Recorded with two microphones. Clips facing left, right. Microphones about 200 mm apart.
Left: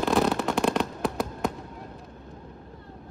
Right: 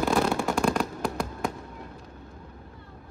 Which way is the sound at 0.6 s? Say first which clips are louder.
Left 1 dB; centre (ahead or behind).